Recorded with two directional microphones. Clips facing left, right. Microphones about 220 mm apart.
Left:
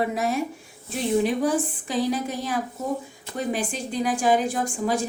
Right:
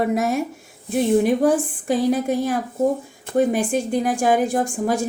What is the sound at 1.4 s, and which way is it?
Speech, 55° right (ahead or behind).